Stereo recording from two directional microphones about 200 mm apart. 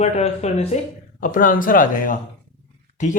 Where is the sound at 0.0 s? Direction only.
35° left (ahead or behind).